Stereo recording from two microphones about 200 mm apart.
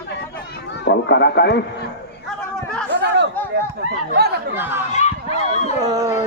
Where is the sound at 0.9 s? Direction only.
60° left (ahead or behind).